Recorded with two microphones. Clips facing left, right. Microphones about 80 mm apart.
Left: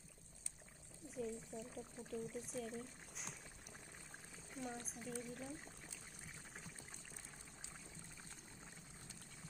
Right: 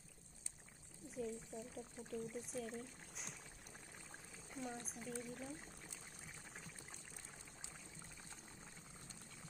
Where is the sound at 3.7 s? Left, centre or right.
Centre.